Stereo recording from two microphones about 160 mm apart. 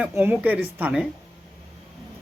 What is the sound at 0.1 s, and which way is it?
Speech, 15° right (ahead or behind).